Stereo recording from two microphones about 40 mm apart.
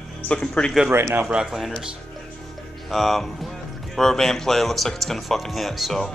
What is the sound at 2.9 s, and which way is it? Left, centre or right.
Speech, centre.